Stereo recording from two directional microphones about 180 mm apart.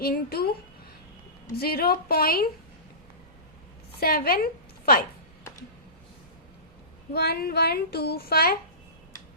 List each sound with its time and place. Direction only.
0.0 s a child's voice: 60° left (ahead or behind)
1.5 s a child's voice: 60° left (ahead or behind)
4.0 s a child's voice: 55° left (ahead or behind)
7.1 s a child's voice: 60° left (ahead or behind)